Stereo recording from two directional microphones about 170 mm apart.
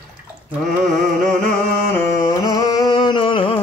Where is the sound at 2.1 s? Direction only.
20° left (ahead or behind).